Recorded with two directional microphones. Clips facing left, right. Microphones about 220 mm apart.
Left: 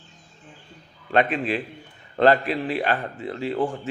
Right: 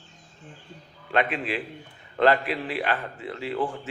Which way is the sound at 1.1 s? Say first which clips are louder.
Left 4 dB; 40° left (ahead or behind).